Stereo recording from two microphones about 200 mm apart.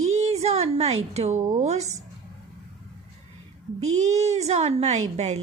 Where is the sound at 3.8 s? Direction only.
35° right (ahead or behind).